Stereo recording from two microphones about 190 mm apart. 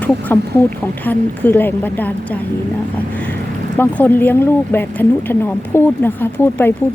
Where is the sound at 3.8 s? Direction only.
10° left (ahead or behind).